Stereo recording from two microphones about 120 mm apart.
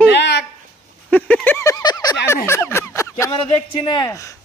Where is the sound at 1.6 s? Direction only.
30° left (ahead or behind).